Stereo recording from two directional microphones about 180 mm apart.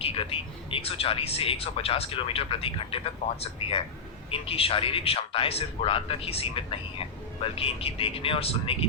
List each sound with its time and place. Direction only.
0.0 s a man's voice: 30° left (ahead or behind)